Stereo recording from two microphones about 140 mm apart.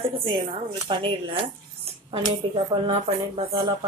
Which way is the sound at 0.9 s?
40° right (ahead or behind).